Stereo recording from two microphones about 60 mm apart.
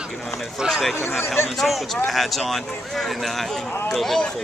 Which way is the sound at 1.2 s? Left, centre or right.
Left.